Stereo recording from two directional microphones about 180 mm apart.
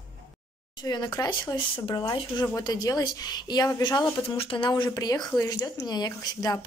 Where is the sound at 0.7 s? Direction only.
25° left (ahead or behind).